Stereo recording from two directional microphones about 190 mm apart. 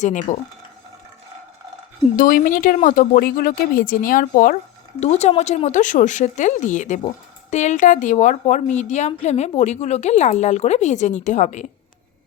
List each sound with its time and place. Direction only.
0.0 s speech: 40° left (ahead or behind)
2.1 s speech: 45° left (ahead or behind)
4.9 s speech: 35° left (ahead or behind)